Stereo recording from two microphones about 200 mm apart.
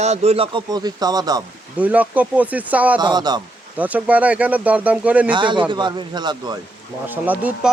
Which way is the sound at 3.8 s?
5° right (ahead or behind).